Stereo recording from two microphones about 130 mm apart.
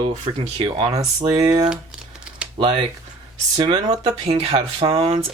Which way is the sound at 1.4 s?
35° right (ahead or behind).